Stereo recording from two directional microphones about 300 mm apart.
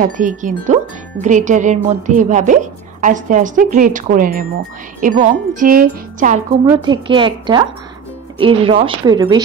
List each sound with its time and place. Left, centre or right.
0.0 s a woman's voice: right
6.6 s a woman's voice: centre